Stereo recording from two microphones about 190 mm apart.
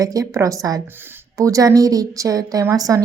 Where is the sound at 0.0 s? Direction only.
20° right (ahead or behind).